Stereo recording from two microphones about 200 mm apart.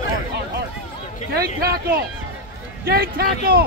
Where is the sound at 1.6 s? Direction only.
50° right (ahead or behind).